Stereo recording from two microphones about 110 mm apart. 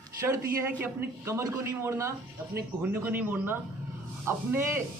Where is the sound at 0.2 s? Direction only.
30° right (ahead or behind).